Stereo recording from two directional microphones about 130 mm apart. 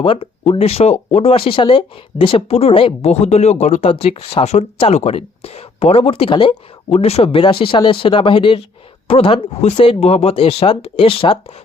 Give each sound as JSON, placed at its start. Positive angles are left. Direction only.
{"t": 0.0, "sound": "speech", "side_deg": 45}